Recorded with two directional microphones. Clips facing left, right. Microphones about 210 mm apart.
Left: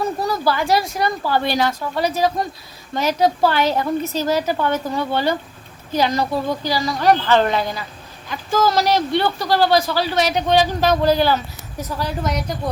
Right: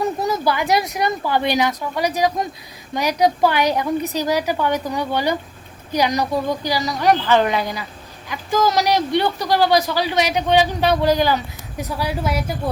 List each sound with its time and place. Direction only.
0.0 s speech: 20° right (ahead or behind)